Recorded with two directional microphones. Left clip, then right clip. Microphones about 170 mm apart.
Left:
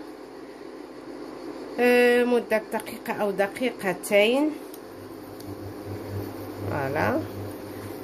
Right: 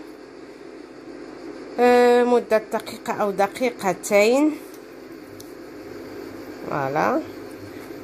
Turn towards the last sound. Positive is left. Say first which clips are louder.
# right 4 dB
turn(degrees=-15)  # may be behind; listen again after turning